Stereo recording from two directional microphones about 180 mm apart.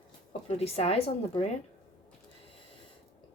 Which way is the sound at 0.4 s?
35° left (ahead or behind).